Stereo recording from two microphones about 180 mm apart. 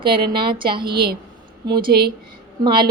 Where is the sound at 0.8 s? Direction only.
60° right (ahead or behind).